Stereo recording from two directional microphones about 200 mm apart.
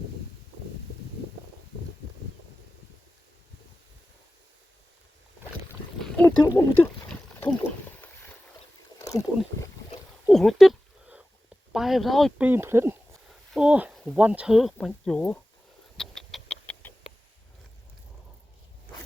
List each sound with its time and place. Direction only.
6.0 s a sound: 5° left (ahead or behind)
7.3 s wild animals: 10° left (ahead or behind)
10.2 s a sound: centre (ahead or behind)
11.7 s speech: centre (ahead or behind)
12.5 s speech: 10° right (ahead or behind); by 15.4 s 5° left (ahead or behind)
16.0 s rodents: 5° left (ahead or behind)